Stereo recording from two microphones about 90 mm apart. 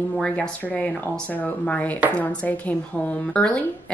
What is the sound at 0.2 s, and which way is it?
A woman's voice, 15° left (ahead or behind).